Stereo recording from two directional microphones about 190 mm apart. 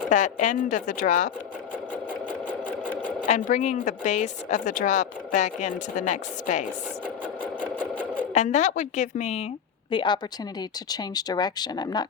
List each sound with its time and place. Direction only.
0.1 s a woman's voice: 40° left (ahead or behind)
3.2 s a woman's voice: 40° left (ahead or behind)
7.6 s sewing machine: 10° left (ahead or behind)
8.3 s a woman's voice: 40° left (ahead or behind)
9.9 s speech: 25° left (ahead or behind)